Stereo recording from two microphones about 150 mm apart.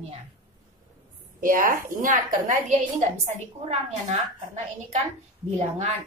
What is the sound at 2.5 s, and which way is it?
A woman's voice, 55° right (ahead or behind).